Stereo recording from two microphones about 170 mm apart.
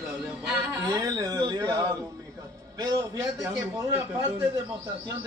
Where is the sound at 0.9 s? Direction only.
20° right (ahead or behind).